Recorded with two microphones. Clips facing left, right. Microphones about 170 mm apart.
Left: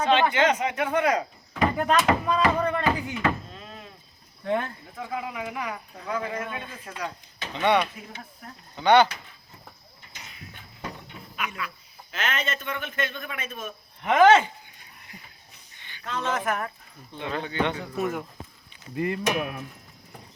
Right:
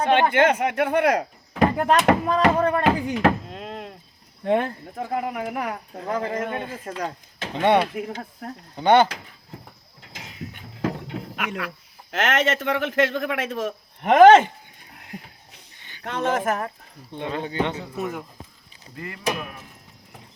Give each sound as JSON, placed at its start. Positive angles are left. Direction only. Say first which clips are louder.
{"t": 0.0, "sound": "speech", "louder": "right 3 dB", "side_deg": -55}
{"t": 5.0, "sound": "speech", "louder": "right 5 dB", "side_deg": -50}
{"t": 7.9, "sound": "speech", "louder": "right 12 dB", "side_deg": -70}
{"t": 9.0, "sound": "a sound", "louder": "right 5 dB", "side_deg": -90}
{"t": 10.0, "sound": "mechanisms", "louder": "right 7 dB", "side_deg": -90}
{"t": 10.8, "sound": "a sound", "louder": "right 11 dB", "side_deg": -90}
{"t": 12.1, "sound": "speech", "louder": "right 8 dB", "side_deg": -90}
{"t": 14.0, "sound": "speech", "louder": "right 6 dB", "side_deg": -50}
{"t": 14.9, "sound": "a sound", "louder": "right 11 dB", "side_deg": -90}
{"t": 16.0, "sound": "speech", "louder": "right 4 dB", "side_deg": -55}
{"t": 17.8, "sound": "speech", "louder": "left 1 dB", "side_deg": 0}
{"t": 18.9, "sound": "speech", "louder": "left 9 dB", "side_deg": 20}